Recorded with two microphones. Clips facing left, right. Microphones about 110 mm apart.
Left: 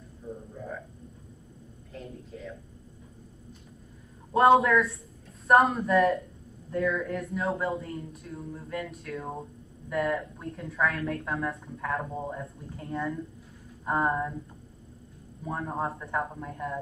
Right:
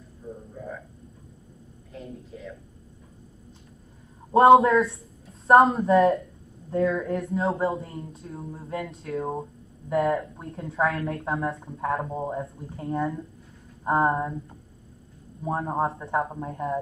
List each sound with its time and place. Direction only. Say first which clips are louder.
1.9 s speech: right 2 dB; centre (ahead or behind)
4.3 s speech: right 5 dB; 30° right (ahead or behind)
15.4 s speech: right 5 dB; 30° right (ahead or behind)